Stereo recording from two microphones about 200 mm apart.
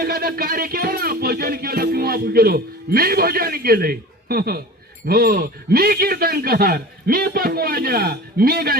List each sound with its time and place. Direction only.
0.0 s music: 50° right (ahead or behind)